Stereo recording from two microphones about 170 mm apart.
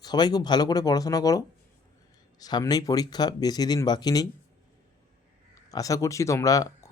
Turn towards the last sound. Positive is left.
turn(degrees=20)  # may be behind; listen again after turning